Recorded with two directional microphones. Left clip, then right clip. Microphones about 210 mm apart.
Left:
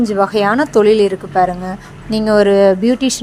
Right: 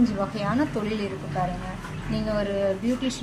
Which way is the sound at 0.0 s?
40° left (ahead or behind).